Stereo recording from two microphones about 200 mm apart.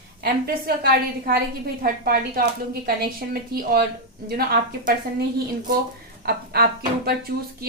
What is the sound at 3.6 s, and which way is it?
Speech, 50° right (ahead or behind).